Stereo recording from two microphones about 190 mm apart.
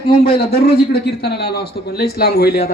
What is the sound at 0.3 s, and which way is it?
A man's voice, 55° left (ahead or behind).